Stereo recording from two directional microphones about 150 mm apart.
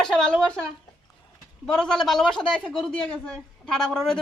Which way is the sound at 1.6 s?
5° left (ahead or behind).